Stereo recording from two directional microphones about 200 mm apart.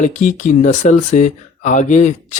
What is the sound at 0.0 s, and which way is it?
Speech, 40° left (ahead or behind).